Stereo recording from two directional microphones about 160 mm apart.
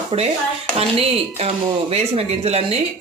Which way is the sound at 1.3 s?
40° right (ahead or behind).